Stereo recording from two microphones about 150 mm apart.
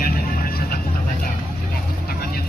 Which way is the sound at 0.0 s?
80° left.